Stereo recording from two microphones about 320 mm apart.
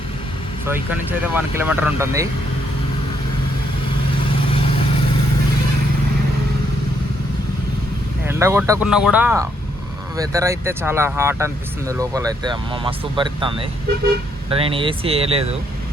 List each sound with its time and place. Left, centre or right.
0.6 s speech: centre
8.3 s speech: centre